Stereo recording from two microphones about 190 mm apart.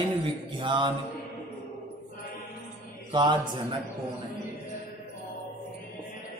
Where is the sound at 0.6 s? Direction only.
25° right (ahead or behind).